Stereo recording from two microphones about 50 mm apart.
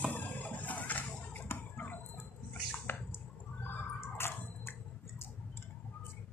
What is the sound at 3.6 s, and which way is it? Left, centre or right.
Drip, left.